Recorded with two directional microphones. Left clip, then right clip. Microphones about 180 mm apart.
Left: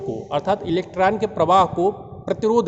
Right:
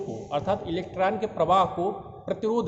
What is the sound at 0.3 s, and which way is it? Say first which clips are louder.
Speech: left 6 dB; 60° left (ahead or behind).